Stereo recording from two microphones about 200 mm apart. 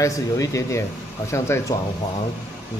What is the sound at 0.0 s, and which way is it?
Speech, 15° left (ahead or behind).